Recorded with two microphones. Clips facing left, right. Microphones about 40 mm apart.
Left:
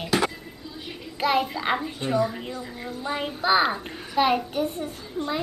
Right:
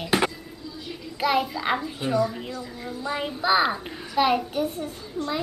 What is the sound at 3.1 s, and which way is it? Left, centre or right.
A child's voice, centre.